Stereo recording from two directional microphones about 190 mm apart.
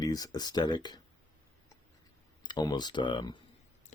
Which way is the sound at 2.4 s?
20° left (ahead or behind).